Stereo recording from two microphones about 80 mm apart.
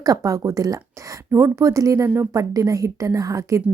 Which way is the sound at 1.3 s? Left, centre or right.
Right.